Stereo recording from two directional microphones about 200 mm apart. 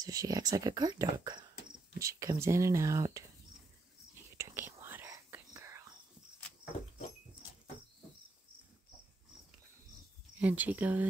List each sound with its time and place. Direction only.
0.0 s speech: 15° right (ahead or behind)
4.1 s whispering: 10° right (ahead or behind)
10.4 s speech: 5° right (ahead or behind)